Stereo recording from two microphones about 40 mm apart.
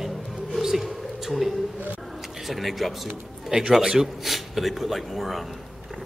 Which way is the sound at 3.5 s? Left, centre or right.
Centre.